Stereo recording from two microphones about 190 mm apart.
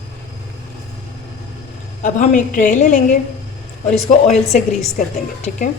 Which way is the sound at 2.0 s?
40° left (ahead or behind).